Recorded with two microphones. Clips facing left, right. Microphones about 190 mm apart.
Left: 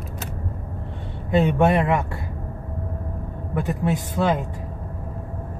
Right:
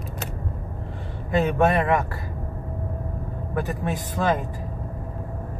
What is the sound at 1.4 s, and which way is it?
Speech, 15° left (ahead or behind).